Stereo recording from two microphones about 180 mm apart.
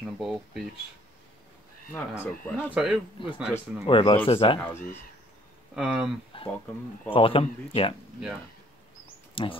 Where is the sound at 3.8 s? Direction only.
30° left (ahead or behind).